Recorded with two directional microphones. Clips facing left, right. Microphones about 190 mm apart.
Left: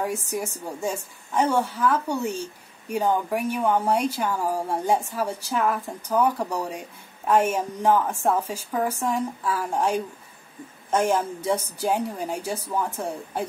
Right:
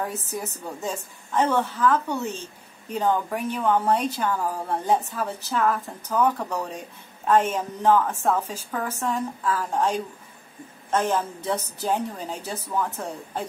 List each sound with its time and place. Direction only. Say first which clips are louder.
0.0 s a woman's voice: left 3 dB; 10° left (ahead or behind)